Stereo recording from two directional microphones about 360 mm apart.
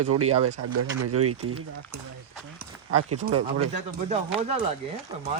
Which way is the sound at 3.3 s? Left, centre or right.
Right.